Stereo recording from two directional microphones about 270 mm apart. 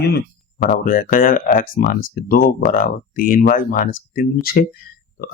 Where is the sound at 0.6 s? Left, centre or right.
Left.